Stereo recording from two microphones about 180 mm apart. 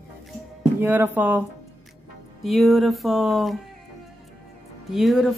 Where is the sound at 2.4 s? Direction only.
Centre (ahead or behind).